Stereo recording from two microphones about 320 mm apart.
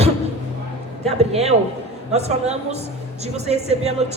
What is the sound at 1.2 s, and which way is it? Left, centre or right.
Speech, centre.